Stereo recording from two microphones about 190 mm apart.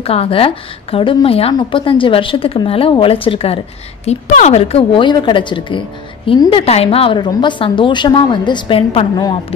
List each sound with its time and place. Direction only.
0.0 s a woman's voice: 30° left (ahead or behind)